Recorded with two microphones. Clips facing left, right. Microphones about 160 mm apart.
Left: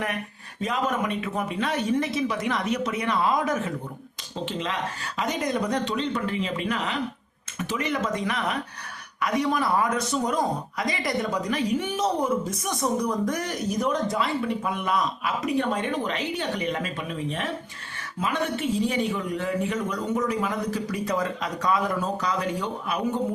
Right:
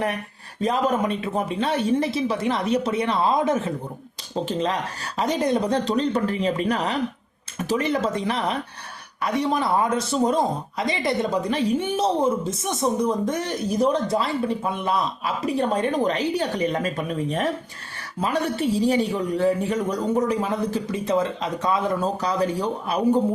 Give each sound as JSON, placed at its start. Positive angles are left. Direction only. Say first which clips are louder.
{"t": 0.6, "sound": "a man's voice", "louder": "right 5 dB", "side_deg": -35}
{"t": 4.4, "sound": "a man's voice", "louder": "right 3 dB", "side_deg": -40}